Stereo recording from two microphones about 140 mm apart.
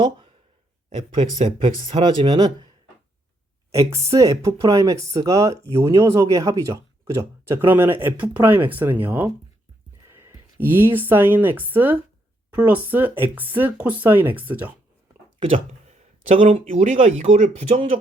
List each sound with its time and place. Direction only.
0.9 s speech: 50° right (ahead or behind); by 2.6 s 30° right (ahead or behind)
3.7 s speech: 20° right (ahead or behind)
15.4 s a sound: 40° right (ahead or behind)
16.6 s speech: 60° right (ahead or behind)